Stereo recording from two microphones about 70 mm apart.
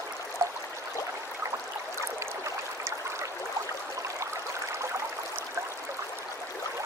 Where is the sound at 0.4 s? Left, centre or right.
Right.